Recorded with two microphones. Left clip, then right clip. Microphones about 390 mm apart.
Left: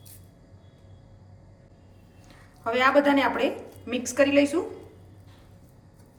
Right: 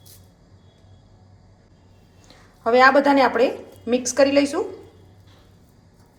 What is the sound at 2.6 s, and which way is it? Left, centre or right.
A woman's voice, centre.